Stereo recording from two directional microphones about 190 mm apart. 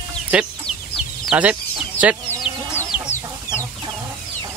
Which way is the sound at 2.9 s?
30° left (ahead or behind).